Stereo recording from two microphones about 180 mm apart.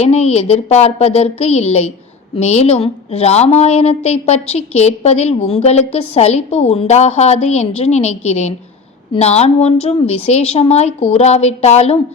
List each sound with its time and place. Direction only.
0.0 s a woman's voice: 35° left (ahead or behind)